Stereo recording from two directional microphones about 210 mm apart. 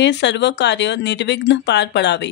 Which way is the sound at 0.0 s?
55° left (ahead or behind).